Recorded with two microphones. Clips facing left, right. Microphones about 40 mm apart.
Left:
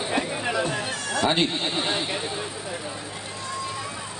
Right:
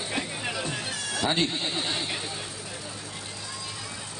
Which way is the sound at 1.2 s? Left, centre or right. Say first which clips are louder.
Left 3 dB; left.